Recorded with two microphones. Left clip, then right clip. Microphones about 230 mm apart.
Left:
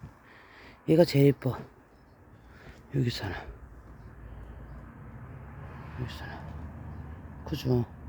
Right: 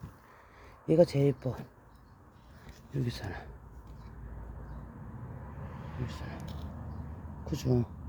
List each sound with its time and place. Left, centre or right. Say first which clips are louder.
0.6 s speech: left 2 dB; centre
2.9 s speech: left 6 dB; centre
6.1 s speech: left 3 dB; centre
7.4 s speech: left 2 dB; centre